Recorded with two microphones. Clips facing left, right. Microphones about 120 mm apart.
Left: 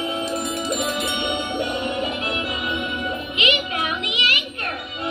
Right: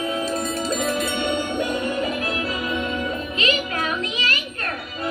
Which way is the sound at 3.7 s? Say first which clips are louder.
Right 1 dB; 15° left (ahead or behind).